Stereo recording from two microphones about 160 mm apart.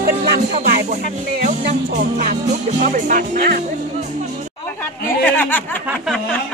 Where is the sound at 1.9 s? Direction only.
60° right (ahead or behind).